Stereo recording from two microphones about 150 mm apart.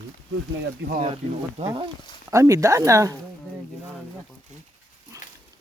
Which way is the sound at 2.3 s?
20° right (ahead or behind).